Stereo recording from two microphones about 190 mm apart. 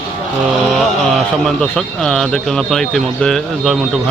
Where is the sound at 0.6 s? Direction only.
Centre (ahead or behind).